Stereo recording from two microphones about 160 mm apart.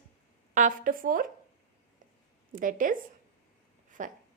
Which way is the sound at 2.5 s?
55° right (ahead or behind).